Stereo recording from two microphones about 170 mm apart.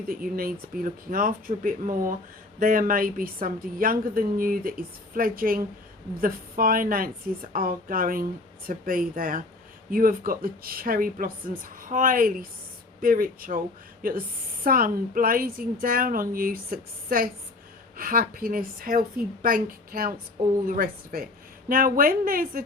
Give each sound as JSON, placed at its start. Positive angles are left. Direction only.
{"t": 0.1, "sound": "a woman's voice", "side_deg": -60}